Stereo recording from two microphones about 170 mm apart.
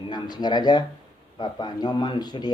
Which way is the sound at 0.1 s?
25° left (ahead or behind).